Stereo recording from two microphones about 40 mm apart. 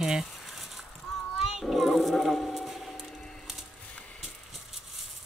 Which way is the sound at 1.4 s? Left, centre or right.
Centre.